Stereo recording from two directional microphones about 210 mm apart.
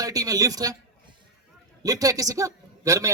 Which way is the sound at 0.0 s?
15° right (ahead or behind).